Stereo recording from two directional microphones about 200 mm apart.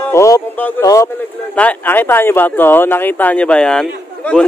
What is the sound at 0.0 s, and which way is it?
A man's voice, 15° left (ahead or behind).